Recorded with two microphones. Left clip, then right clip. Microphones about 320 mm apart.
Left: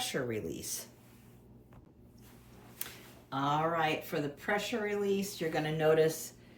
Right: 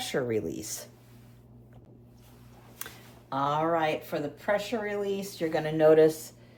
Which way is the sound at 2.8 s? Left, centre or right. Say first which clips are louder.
Right 3 dB; centre.